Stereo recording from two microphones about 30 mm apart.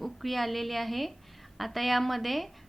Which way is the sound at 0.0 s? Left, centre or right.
Centre.